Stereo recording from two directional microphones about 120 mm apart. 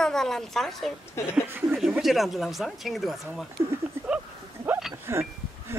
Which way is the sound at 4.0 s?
20° right (ahead or behind).